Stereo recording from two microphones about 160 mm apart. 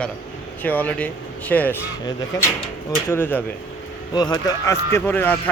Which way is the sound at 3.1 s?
10° left (ahead or behind).